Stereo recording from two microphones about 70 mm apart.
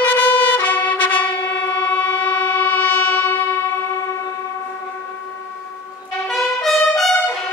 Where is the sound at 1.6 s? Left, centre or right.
Left.